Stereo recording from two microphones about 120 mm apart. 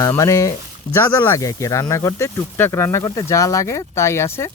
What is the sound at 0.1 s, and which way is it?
Speech, 25° left (ahead or behind).